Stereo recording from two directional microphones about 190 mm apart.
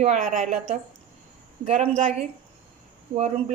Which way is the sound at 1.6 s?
30° right (ahead or behind).